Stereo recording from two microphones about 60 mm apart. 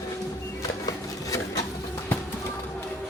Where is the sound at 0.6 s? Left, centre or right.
Left.